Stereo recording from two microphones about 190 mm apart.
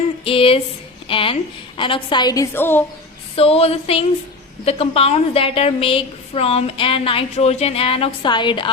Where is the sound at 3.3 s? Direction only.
30° left (ahead or behind).